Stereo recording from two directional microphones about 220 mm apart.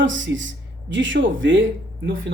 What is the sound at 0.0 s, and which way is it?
Speech, 60° right (ahead or behind).